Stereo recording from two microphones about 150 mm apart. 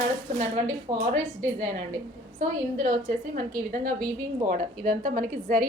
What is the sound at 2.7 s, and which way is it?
A woman's voice, 60° right (ahead or behind).